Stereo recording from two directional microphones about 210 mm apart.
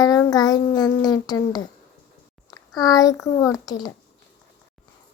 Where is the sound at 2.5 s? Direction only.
20° left (ahead or behind).